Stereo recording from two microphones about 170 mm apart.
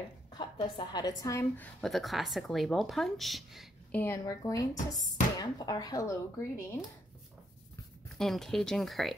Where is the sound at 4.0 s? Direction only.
15° left (ahead or behind).